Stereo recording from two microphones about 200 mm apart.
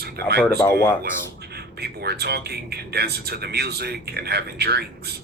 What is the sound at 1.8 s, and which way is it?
Speech, 55° right (ahead or behind).